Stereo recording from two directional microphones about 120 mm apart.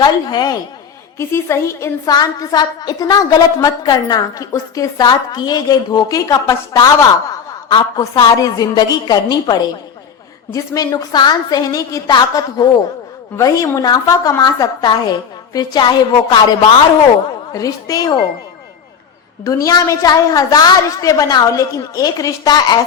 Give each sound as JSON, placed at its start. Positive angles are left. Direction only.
{"t": 0.0, "sound": "a woman's voice", "side_deg": 35}
{"t": 1.2, "sound": "a woman's voice", "side_deg": 20}
{"t": 19.5, "sound": "a woman's voice", "side_deg": 30}